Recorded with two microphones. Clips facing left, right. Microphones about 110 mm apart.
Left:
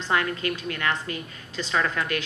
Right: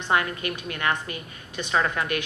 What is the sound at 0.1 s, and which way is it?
A woman's voice, 25° right (ahead or behind).